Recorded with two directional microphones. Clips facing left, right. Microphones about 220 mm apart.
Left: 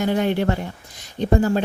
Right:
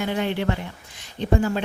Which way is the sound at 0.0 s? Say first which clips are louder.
Left 4 dB; 45° left (ahead or behind).